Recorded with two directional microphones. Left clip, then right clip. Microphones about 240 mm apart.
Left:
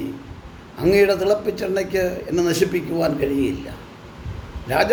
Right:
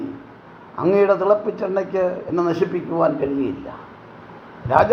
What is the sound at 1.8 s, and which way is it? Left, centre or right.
A man's voice, centre.